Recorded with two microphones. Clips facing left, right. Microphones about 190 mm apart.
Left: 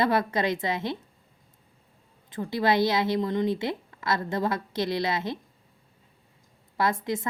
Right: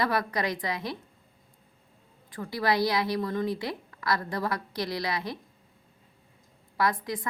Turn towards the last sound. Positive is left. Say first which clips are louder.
# left 2 dB
turn(degrees=25)  # may be behind; listen again after turning